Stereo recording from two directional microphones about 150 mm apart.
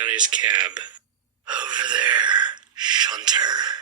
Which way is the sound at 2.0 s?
30° right (ahead or behind).